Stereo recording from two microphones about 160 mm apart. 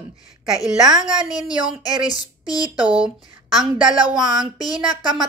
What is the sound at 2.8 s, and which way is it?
Speech, 5° right (ahead or behind).